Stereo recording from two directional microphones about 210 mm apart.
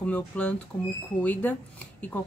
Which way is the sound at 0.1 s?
5° left (ahead or behind).